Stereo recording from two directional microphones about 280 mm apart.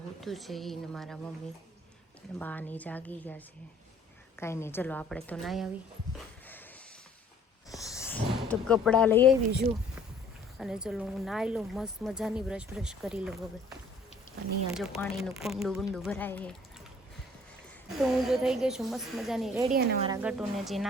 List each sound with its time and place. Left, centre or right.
0.2 s speech: centre
2.4 s speech: centre
7.9 s speech: centre
17.9 s speech: centre